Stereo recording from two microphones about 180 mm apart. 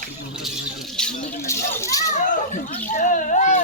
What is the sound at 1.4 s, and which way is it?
Speech, 15° left (ahead or behind).